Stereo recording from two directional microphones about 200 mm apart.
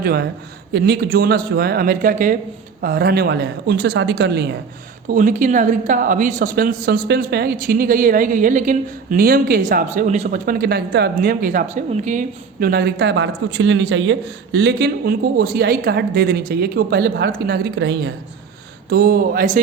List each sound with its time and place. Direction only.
0.0 s a woman's voice: 50° right (ahead or behind)
5.0 s a woman's voice: 40° right (ahead or behind); by 18.1 s 60° right (ahead or behind)
18.9 s a woman's voice: 45° right (ahead or behind)